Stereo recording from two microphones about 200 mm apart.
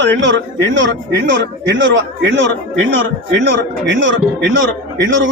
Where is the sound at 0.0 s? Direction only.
60° right (ahead or behind).